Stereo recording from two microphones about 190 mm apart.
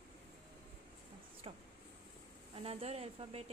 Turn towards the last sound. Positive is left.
turn(degrees=-30)  # may be behind; listen again after turning